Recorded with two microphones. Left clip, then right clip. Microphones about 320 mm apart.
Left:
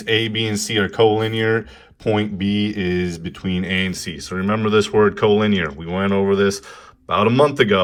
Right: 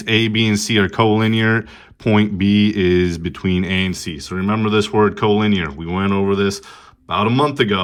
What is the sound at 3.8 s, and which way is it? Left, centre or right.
Speech, centre.